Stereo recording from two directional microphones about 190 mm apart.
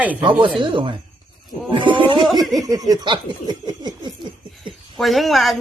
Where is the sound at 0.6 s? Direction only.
25° right (ahead or behind).